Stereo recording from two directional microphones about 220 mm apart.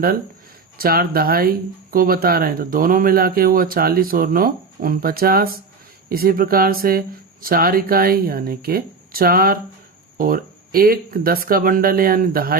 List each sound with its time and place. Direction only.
0.8 s speech: 40° right (ahead or behind)